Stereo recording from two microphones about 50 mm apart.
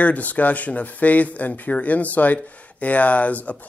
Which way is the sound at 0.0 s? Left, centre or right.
Left.